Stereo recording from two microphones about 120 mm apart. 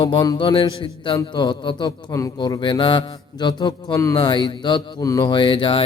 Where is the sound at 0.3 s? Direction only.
45° left (ahead or behind).